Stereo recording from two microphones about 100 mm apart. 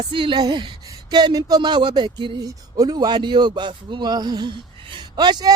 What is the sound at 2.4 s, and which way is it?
A woman's voice, 40° right (ahead or behind).